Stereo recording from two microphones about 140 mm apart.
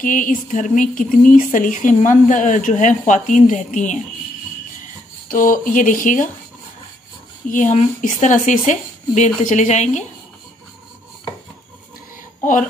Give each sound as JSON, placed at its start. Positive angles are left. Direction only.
{"t": 0.0, "sound": "speech", "side_deg": 70}
{"t": 5.3, "sound": "speech", "side_deg": 75}
{"t": 7.4, "sound": "speech", "side_deg": 65}